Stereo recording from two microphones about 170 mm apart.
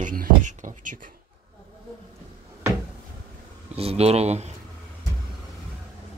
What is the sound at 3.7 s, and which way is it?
Speech, 35° right (ahead or behind).